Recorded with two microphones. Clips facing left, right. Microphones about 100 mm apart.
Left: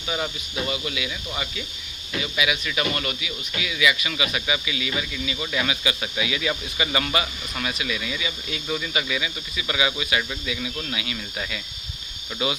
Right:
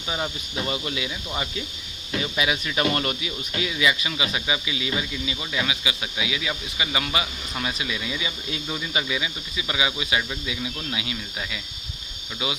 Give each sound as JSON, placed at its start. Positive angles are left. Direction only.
{"t": 0.1, "sound": "speech", "side_deg": -20}
{"t": 0.7, "sound": "speech", "side_deg": -30}